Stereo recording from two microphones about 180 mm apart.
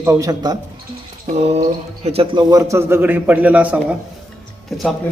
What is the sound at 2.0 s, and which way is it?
Speech, 30° right (ahead or behind).